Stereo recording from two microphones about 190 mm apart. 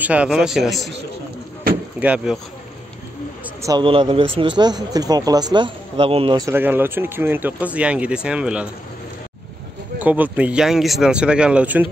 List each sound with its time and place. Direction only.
0.0 s speech: 5° right (ahead or behind)
2.0 s speech: 5° right (ahead or behind)
3.6 s speech: 25° right (ahead or behind)
6.4 s speech: 10° right (ahead or behind)
9.9 s speech: 10° right (ahead or behind)